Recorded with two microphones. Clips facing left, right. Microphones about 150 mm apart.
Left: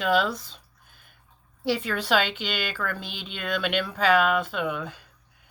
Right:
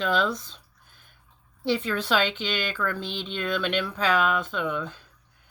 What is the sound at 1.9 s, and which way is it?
A woman's voice, 10° left (ahead or behind).